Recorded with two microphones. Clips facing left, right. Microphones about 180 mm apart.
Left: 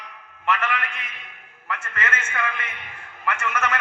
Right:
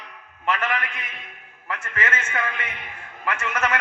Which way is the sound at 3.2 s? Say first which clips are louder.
Left 1 dB; 40° right (ahead or behind).